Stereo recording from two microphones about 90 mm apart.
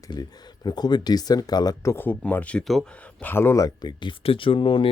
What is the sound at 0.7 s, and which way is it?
Speech, 50° left (ahead or behind).